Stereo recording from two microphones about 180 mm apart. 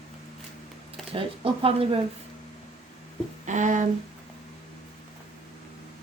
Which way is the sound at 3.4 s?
45° right (ahead or behind).